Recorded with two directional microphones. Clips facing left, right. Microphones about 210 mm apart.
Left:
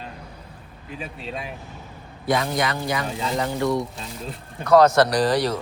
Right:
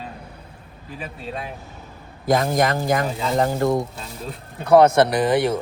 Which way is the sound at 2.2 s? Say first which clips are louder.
Right 4 dB; 45° right (ahead or behind).